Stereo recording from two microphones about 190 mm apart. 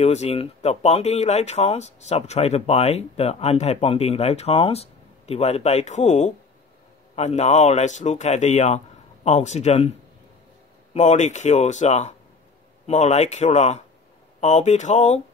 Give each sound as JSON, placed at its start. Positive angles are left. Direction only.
{"t": 0.0, "sound": "speech", "side_deg": 35}